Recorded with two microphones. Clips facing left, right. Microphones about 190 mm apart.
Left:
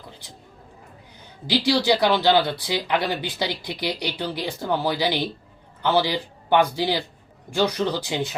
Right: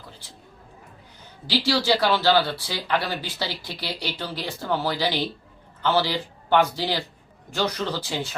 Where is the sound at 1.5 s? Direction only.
15° left (ahead or behind).